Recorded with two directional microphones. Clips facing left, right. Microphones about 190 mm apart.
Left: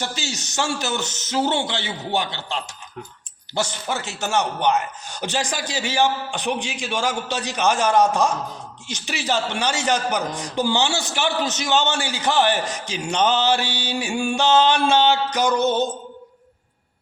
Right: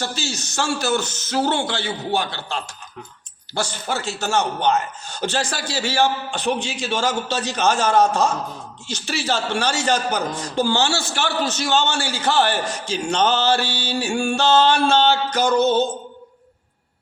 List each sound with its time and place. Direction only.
0.0 s a man's voice: 20° left (ahead or behind)